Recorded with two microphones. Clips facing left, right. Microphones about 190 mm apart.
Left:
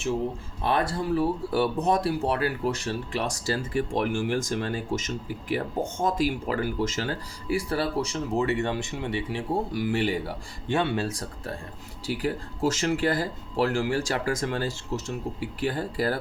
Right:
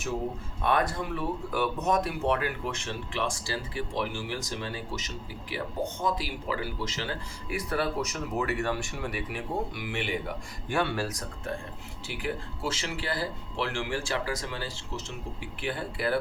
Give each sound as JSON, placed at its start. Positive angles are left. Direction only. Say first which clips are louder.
{"t": 0.6, "sound": "speech", "louder": "left 2 dB", "side_deg": 30}
{"t": 7.5, "sound": "speech", "louder": "left 4 dB", "side_deg": 30}
{"t": 10.7, "sound": "speech", "louder": "left 3 dB", "side_deg": 20}